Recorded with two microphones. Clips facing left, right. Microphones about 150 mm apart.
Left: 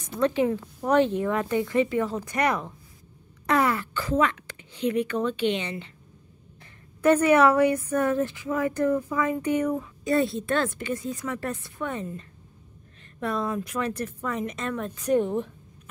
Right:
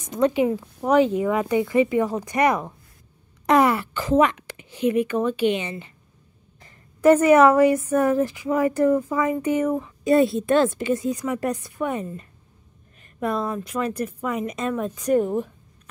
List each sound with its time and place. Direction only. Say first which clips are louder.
0.1 s a woman's voice: right 3 dB; 15° right (ahead or behind)
9.8 s a woman's voice: right 6 dB; 20° right (ahead or behind); by 15.5 s 5° right (ahead or behind)